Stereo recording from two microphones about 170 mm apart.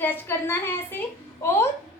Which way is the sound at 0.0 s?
15° left (ahead or behind).